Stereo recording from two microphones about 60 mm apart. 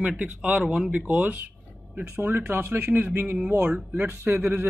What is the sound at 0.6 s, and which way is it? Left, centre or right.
Speech, centre.